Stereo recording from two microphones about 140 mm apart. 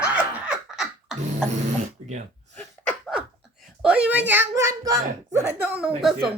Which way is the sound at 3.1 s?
5° right (ahead or behind).